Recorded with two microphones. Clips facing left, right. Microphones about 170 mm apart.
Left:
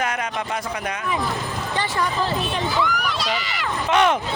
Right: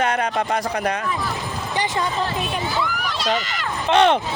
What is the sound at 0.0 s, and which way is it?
Speech, 35° right (ahead or behind).